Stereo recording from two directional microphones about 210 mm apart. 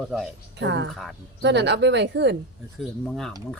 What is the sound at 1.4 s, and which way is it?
Speech, 55° right (ahead or behind).